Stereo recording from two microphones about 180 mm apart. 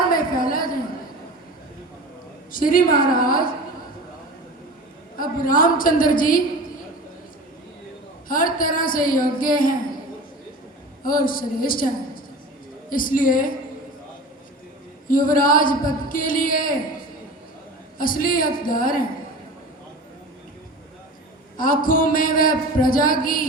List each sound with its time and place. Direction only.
0.1 s a sound: 50° left (ahead or behind)
2.5 s a man's voice: 50° left (ahead or behind)
5.1 s a man's voice: 50° left (ahead or behind)
8.3 s a man's voice: 50° left (ahead or behind)
11.0 s a man's voice: 50° left (ahead or behind)
15.0 s a man's voice: 50° left (ahead or behind)
17.9 s a man's voice: 50° left (ahead or behind)
21.6 s a man's voice: 50° left (ahead or behind)